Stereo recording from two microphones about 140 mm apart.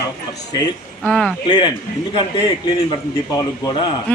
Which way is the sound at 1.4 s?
30° left (ahead or behind).